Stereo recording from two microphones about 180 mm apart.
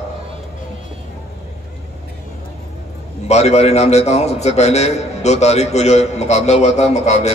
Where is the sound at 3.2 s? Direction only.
35° left (ahead or behind).